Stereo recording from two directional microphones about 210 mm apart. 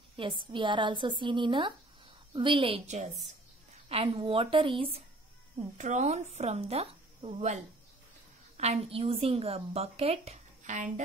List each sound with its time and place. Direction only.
0.2 s a woman's voice: 25° right (ahead or behind)